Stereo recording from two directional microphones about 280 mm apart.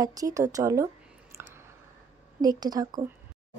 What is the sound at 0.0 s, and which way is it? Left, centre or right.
Speech, centre.